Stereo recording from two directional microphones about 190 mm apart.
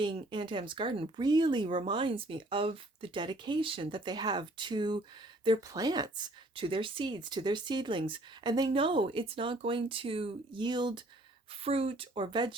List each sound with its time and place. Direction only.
0.0 s speech: 25° right (ahead or behind)